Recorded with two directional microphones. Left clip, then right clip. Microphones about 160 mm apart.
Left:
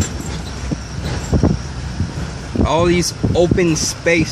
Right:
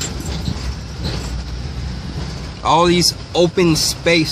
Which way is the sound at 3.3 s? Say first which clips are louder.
Even; 30° right (ahead or behind).